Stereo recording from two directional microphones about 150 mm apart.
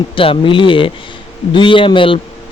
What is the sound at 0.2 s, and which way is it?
A man's voice, 35° left (ahead or behind).